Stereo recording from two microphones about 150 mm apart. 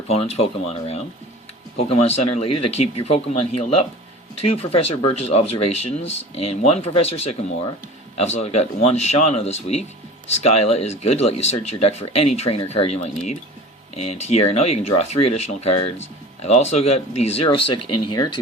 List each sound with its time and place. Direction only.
0.1 s speech: 45° left (ahead or behind)
18.0 s speech: 30° left (ahead or behind)